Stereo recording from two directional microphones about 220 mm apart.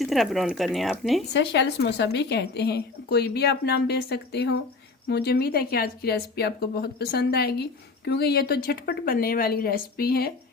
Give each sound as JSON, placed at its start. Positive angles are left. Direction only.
{"t": 0.0, "sound": "speech", "side_deg": 0}
{"t": 1.3, "sound": "speech", "side_deg": 50}